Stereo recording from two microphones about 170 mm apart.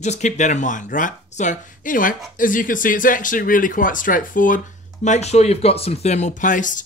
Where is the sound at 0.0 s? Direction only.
45° left (ahead or behind).